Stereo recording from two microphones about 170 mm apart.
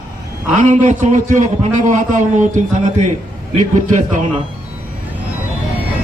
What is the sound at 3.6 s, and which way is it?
Speech, 50° right (ahead or behind).